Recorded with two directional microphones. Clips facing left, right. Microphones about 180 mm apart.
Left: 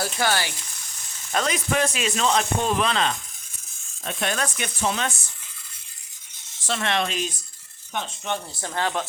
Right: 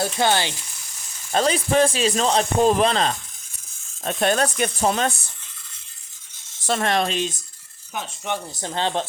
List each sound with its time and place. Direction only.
0.0 s speech: 25° right (ahead or behind); by 5.1 s 40° right (ahead or behind)
6.7 s speech: 40° right (ahead or behind)
7.9 s speech: 15° right (ahead or behind)